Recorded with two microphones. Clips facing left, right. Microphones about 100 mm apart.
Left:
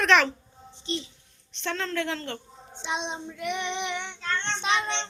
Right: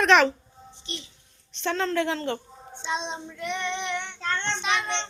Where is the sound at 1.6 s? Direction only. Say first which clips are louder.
Right 4 dB; 15° right (ahead or behind).